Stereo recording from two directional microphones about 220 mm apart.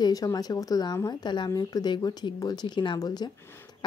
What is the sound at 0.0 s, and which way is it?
Speech, 15° left (ahead or behind).